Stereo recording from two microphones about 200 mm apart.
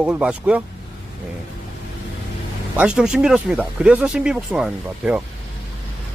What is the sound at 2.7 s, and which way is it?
Speech, 5° right (ahead or behind).